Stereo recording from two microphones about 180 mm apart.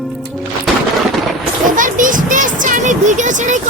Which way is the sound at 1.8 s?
45° right (ahead or behind).